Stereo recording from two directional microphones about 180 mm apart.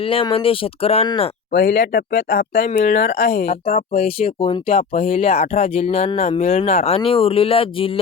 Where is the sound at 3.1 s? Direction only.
60° left (ahead or behind).